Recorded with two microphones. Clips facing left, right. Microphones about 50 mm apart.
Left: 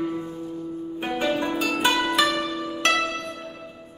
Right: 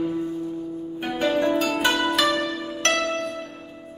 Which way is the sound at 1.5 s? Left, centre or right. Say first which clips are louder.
Right 1 dB; centre.